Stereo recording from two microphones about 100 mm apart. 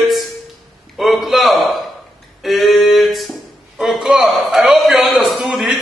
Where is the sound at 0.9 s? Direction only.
Centre (ahead or behind).